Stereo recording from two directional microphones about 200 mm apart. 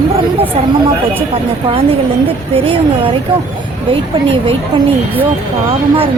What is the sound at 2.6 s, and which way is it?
Speech, 25° right (ahead or behind).